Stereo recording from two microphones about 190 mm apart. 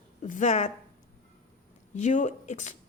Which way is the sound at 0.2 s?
40° left (ahead or behind).